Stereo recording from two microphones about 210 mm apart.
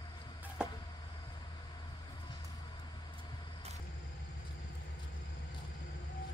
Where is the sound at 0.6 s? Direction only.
5° right (ahead or behind).